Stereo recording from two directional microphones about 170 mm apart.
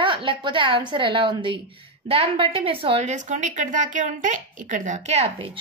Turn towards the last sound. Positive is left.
turn(degrees=-35)  # may be behind; listen again after turning